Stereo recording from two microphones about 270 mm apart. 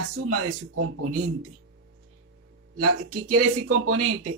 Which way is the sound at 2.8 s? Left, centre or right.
Right.